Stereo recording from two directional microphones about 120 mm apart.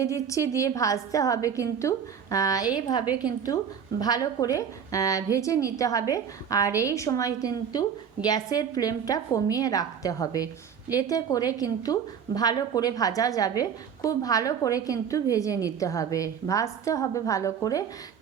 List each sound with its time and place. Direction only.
0.0 s a woman's voice: 25° left (ahead or behind)
4.0 s a woman's voice: 35° left (ahead or behind)